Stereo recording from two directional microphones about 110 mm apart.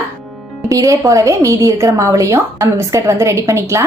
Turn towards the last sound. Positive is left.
turn(degrees=-25)  # may be behind; listen again after turning